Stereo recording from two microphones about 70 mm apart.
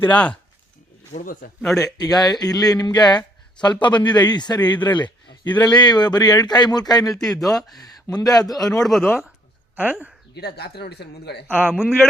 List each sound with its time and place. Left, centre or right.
0.0 s speech: centre
1.6 s speech: centre
2.1 s speech: left
5.6 s speech: left
7.2 s speech: centre
8.1 s a man's voice: left
8.7 s speech: centre
9.7 s speech: right
11.4 s a man's voice: right